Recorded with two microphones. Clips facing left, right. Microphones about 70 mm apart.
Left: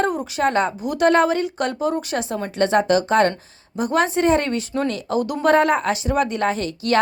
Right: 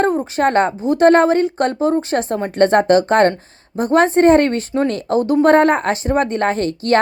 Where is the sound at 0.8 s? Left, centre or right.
Right.